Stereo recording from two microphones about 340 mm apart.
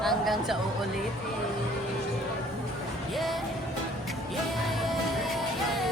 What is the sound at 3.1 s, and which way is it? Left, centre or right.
Music, centre.